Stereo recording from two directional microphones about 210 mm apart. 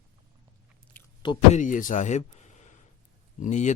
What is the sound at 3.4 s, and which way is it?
Speech, 35° left (ahead or behind).